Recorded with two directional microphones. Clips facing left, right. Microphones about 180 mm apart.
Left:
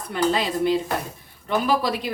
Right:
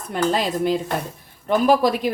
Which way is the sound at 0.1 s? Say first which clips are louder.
Right 1 dB; 45° right (ahead or behind).